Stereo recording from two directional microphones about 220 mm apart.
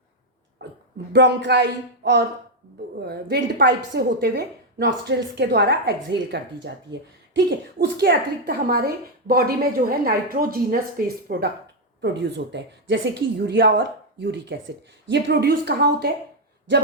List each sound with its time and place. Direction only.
0.6 s a sound: 50° right (ahead or behind)
1.1 s a woman's voice: 55° right (ahead or behind)
7.9 s a woman's voice: 45° right (ahead or behind)